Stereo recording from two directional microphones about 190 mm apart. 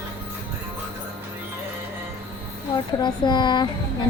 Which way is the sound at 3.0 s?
25° left (ahead or behind).